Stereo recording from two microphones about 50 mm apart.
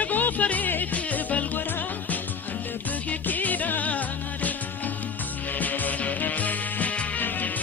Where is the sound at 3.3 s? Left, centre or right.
Left.